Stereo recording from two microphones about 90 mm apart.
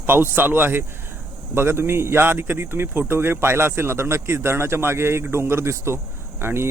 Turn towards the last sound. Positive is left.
turn(degrees=-25)  # may be behind; listen again after turning